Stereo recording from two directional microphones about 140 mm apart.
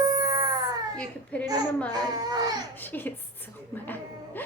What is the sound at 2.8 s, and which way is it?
Speech, 15° left (ahead or behind).